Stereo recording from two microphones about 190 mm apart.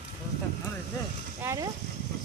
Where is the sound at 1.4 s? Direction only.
15° right (ahead or behind).